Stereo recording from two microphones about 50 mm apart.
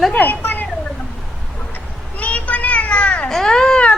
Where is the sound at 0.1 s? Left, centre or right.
Left.